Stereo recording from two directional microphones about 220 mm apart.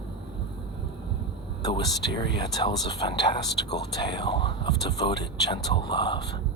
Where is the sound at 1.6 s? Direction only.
20° left (ahead or behind).